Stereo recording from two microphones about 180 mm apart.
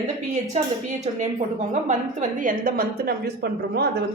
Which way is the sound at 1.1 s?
35° right (ahead or behind).